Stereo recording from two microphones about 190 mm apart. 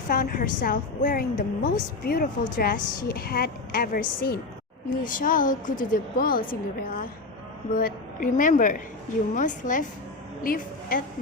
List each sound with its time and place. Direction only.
0.1 s a woman's voice: 45° left (ahead or behind)
5.0 s a woman's voice: 45° left (ahead or behind)